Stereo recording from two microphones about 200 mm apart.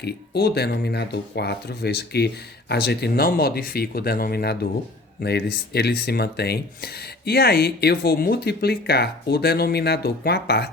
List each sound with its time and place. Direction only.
0.0 s speech: 55° left (ahead or behind)